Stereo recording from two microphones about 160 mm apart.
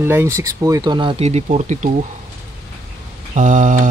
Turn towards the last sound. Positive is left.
turn(degrees=-55)  # may be behind; listen again after turning